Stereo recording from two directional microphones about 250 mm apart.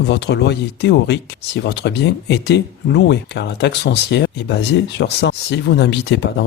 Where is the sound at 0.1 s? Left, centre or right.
Left.